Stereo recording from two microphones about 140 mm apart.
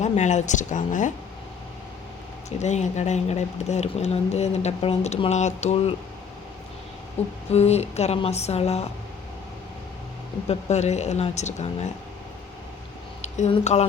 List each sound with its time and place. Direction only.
0.0 s speech: 55° left (ahead or behind)
2.6 s speech: 55° left (ahead or behind)
7.2 s speech: 50° left (ahead or behind)
10.5 s speech: 55° left (ahead or behind)
13.2 s a sound: 55° left (ahead or behind)
13.7 s speech: 45° left (ahead or behind)